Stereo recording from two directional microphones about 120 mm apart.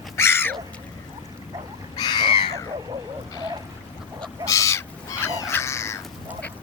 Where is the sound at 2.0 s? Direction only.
40° left (ahead or behind).